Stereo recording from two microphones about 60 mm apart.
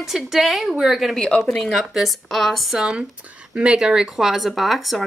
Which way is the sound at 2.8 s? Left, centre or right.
Centre.